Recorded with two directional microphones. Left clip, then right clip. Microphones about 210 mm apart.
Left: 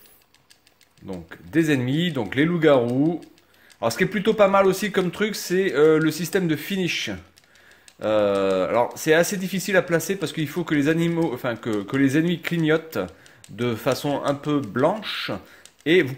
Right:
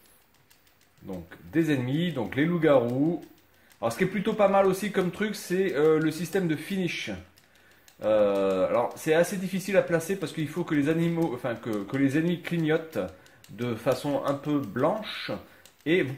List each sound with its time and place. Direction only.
1.0 s speech: 40° left (ahead or behind)
3.8 s speech: 45° left (ahead or behind)